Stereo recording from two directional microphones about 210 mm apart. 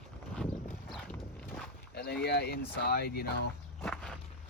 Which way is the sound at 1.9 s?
50° left (ahead or behind).